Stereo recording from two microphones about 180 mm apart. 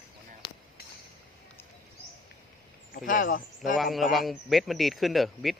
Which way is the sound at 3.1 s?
50° left (ahead or behind).